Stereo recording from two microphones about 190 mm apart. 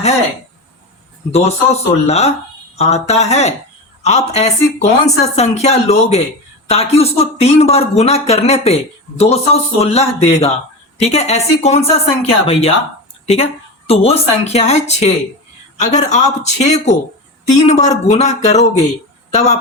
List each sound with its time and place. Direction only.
1.3 s speech: 35° left (ahead or behind)